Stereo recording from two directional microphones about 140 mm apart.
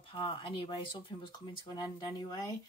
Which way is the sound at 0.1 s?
35° left (ahead or behind).